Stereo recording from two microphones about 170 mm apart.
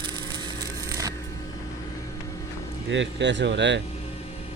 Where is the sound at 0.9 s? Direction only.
20° right (ahead or behind).